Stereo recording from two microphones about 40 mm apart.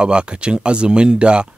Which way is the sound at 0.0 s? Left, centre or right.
Right.